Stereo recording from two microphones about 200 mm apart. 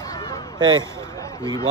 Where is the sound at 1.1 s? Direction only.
15° left (ahead or behind).